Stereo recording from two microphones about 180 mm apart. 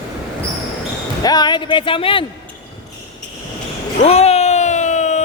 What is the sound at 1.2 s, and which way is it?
Speech, 25° left (ahead or behind).